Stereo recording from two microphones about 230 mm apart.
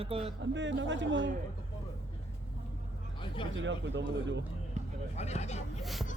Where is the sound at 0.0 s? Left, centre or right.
Right.